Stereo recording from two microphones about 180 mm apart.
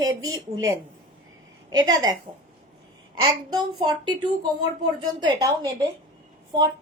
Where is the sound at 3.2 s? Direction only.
25° right (ahead or behind).